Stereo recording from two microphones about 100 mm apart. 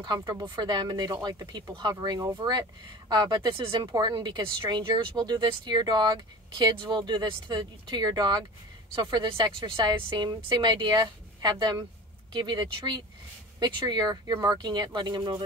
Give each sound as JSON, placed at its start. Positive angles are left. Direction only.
{"t": 0.2, "sound": "speech", "side_deg": -45}